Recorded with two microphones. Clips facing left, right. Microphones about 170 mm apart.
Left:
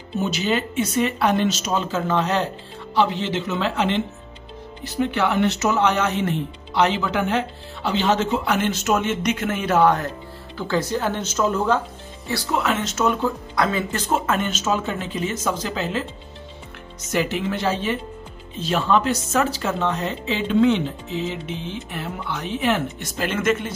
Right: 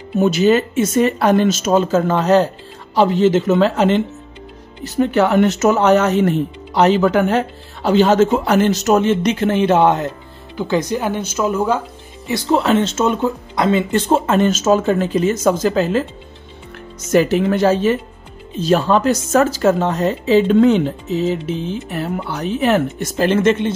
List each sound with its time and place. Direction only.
0.2 s speech: 50° right (ahead or behind); by 11.8 s 10° right (ahead or behind)
12.4 s speech: 30° right (ahead or behind)
14.5 s speech: 40° right (ahead or behind)
17.1 s speech: 45° right (ahead or behind)